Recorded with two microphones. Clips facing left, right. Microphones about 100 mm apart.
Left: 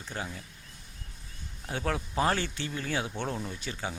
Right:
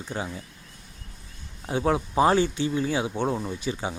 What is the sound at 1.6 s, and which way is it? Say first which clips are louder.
Speech: right 8 dB; 20° right (ahead or behind).